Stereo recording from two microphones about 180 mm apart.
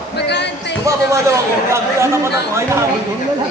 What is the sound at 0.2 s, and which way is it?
Music, 70° left (ahead or behind).